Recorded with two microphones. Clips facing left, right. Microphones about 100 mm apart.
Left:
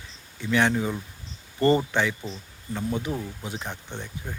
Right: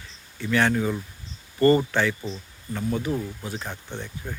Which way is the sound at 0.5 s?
15° left (ahead or behind).